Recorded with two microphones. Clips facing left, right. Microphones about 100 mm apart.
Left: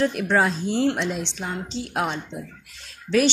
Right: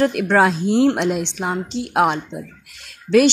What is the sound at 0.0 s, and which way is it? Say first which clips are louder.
A woman's voice: right 5 dB; 70° right (ahead or behind).